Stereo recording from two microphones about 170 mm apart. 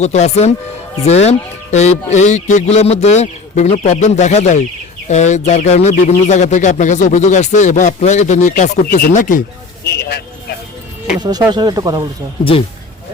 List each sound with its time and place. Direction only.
0.0 s speech: 40° left (ahead or behind)
9.8 s speech: 70° left (ahead or behind)
11.2 s speech: 25° right (ahead or behind)
12.5 s speech: 35° left (ahead or behind)